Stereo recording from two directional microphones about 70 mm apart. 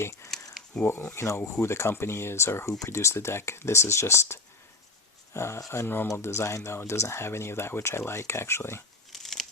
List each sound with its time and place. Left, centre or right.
0.0 s a sound: left
0.9 s speech: left
5.8 s speech: left
9.1 s scissors: centre